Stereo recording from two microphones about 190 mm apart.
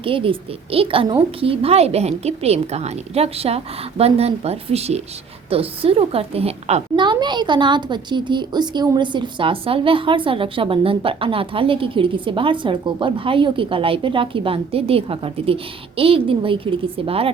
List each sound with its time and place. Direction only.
0.0 s a woman's voice: 30° right (ahead or behind)